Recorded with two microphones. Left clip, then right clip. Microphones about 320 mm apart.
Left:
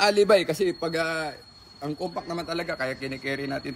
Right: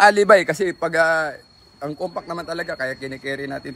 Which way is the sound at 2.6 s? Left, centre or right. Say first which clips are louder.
Right 3 dB; centre.